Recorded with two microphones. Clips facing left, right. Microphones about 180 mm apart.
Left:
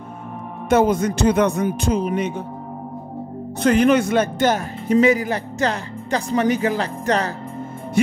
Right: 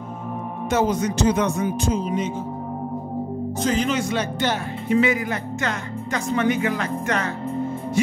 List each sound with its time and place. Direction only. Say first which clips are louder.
0.7 s speech: left 5 dB; 55° left (ahead or behind)
3.6 s speech: left 8 dB; 60° left (ahead or behind); by 7.2 s 35° left (ahead or behind)